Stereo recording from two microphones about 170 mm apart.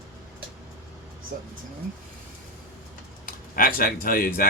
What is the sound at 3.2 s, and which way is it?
Speech, 55° left (ahead or behind).